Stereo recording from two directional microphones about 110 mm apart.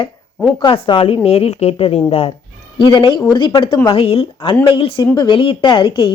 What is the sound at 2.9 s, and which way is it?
Speech, 45° left (ahead or behind).